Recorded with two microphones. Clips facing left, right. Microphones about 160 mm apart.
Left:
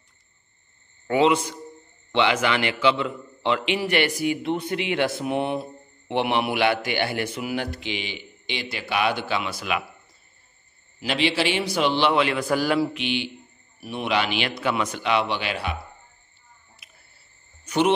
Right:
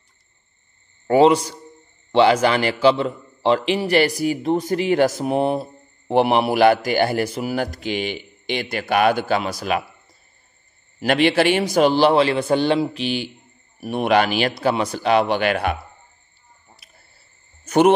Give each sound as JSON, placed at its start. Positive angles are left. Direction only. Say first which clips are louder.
{"t": 1.0, "sound": "a man's voice", "louder": "right 6 dB", "side_deg": -40}
{"t": 11.0, "sound": "a man's voice", "louder": "right 7 dB", "side_deg": -50}
{"t": 13.0, "sound": "a man's voice", "louder": "right 3 dB", "side_deg": -40}
{"t": 17.6, "sound": "speech", "louder": "right 6 dB", "side_deg": -50}